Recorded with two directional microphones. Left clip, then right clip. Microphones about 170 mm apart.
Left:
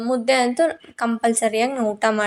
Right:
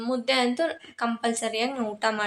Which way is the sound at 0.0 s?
30° left (ahead or behind).